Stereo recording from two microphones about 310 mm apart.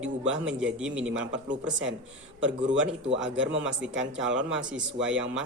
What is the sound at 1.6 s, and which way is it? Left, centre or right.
Speech, right.